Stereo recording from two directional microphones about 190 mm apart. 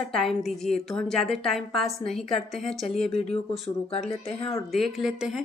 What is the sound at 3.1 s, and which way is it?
Speech, 30° left (ahead or behind).